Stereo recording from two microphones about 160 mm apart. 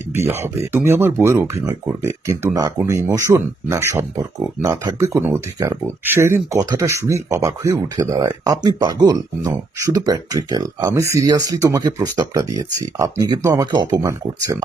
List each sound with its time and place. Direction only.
0.1 s speech: 15° right (ahead or behind)